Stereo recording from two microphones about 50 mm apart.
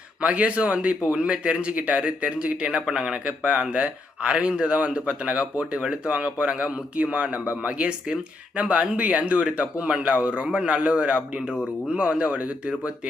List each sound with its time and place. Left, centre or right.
0.2 s a man's voice: right